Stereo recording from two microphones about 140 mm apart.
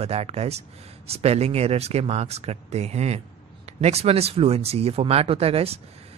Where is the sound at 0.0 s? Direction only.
45° right (ahead or behind).